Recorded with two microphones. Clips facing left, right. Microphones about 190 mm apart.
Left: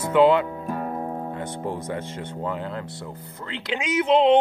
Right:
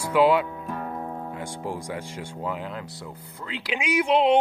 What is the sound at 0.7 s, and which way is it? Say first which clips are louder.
Music: left 4 dB; 30° left (ahead or behind).